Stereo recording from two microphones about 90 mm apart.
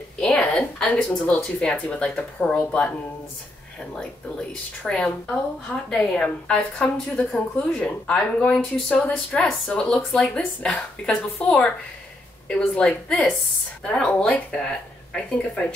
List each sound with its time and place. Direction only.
0.2 s speech: 10° left (ahead or behind)
3.9 s speech: 10° left (ahead or behind)